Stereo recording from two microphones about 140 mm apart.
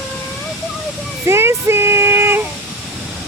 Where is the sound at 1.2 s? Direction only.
20° right (ahead or behind).